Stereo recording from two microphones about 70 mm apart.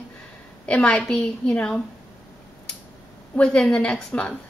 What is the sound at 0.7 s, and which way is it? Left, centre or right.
A woman's voice, centre.